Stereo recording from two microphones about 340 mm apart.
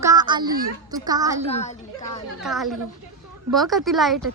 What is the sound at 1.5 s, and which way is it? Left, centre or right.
Speech, centre.